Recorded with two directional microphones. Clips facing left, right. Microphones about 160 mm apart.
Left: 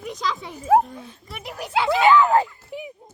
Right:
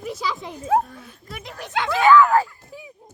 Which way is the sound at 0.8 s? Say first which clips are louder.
Left 3 dB; 20° left (ahead or behind).